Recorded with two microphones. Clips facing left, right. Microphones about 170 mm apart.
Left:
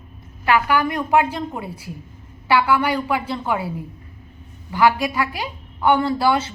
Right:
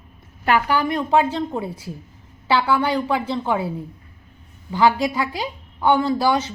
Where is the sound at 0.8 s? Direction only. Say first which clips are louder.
Even; 25° right (ahead or behind).